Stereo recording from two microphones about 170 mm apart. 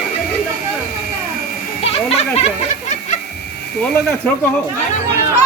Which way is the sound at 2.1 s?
40° left (ahead or behind).